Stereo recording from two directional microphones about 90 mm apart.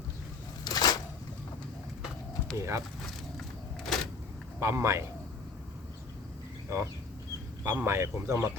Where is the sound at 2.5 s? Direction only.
35° right (ahead or behind).